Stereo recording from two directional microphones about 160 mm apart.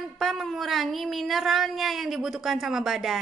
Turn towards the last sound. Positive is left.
turn(degrees=0)  # may be behind; listen again after turning